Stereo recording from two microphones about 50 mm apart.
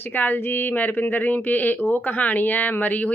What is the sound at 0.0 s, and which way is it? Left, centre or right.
Speech, left.